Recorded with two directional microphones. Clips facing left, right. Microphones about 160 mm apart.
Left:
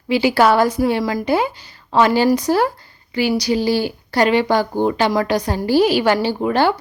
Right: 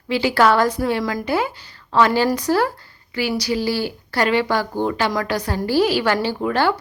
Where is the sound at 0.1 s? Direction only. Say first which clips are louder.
Left 2 dB; 10° left (ahead or behind).